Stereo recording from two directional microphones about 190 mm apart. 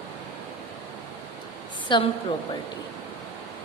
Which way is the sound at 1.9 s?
25° left (ahead or behind).